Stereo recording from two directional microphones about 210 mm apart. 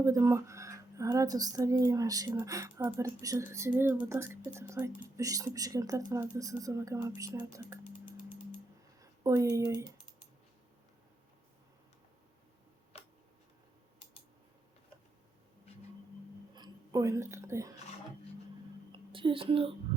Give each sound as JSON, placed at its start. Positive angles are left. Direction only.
{"t": 0.0, "sound": "speech", "side_deg": -15}
{"t": 16.6, "sound": "whispering", "side_deg": -15}
{"t": 18.9, "sound": "a sound", "side_deg": -25}